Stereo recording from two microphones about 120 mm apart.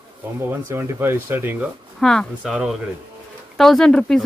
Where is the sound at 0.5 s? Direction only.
20° right (ahead or behind).